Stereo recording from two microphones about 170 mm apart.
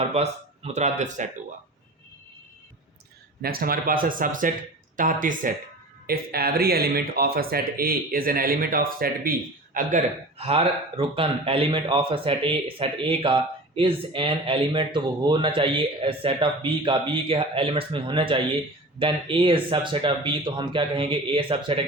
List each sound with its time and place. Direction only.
0.0 s speech: 40° right (ahead or behind)
3.4 s speech: 60° right (ahead or behind)
6.1 s speech: 65° right (ahead or behind)
10.3 s speech: 35° right (ahead or behind)